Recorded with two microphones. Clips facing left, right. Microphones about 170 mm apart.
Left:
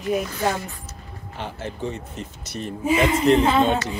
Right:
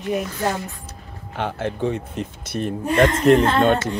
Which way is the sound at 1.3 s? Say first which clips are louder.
Right 7 dB; 60° right (ahead or behind).